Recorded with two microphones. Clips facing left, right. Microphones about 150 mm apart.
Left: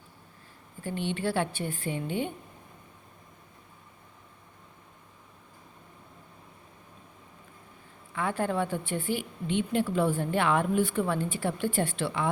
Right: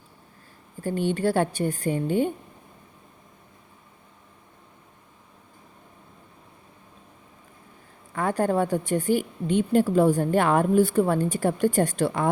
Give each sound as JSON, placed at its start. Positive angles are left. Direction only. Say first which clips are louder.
{"t": 0.8, "sound": "a woman's voice", "louder": "right 7 dB", "side_deg": -45}
{"t": 8.1, "sound": "a woman's voice", "louder": "right 6 dB", "side_deg": -40}